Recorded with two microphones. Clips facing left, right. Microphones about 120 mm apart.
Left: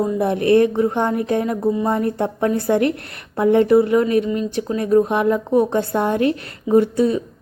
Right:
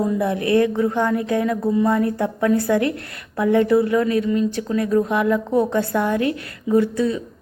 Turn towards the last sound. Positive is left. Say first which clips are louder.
# left 3 dB
turn(degrees=20)  # may be behind; listen again after turning